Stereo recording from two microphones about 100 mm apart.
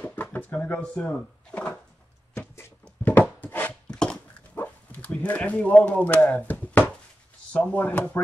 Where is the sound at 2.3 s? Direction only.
25° left (ahead or behind); by 4.2 s 10° left (ahead or behind).